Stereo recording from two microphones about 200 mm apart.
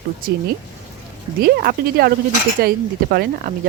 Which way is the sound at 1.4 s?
50° right (ahead or behind).